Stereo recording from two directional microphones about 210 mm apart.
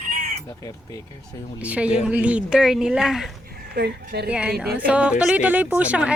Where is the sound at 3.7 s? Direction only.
50° right (ahead or behind).